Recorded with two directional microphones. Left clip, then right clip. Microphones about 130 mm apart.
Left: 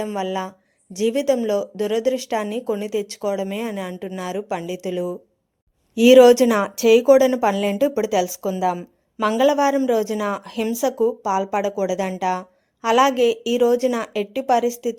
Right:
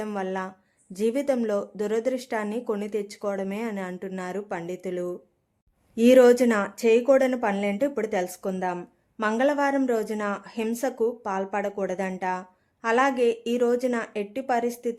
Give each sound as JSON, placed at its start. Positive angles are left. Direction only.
{"t": 0.0, "sound": "speech", "side_deg": 10}
{"t": 9.4, "sound": "speech", "side_deg": 20}